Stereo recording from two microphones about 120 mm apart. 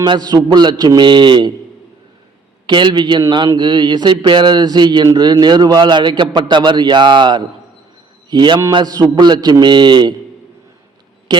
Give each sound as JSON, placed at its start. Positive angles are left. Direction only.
{"t": 0.0, "sound": "a man's voice", "side_deg": -35}
{"t": 2.6, "sound": "a man's voice", "side_deg": -40}
{"t": 8.3, "sound": "mantra", "side_deg": -40}
{"t": 8.7, "sound": "a man's voice", "side_deg": -35}
{"t": 11.3, "sound": "a man's voice", "side_deg": -35}